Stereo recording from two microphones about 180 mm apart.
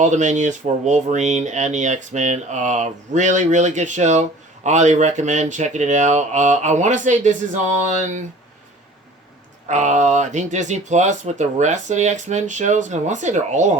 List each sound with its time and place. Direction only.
0.0 s speech: 40° right (ahead or behind)
9.6 s speech: 40° right (ahead or behind)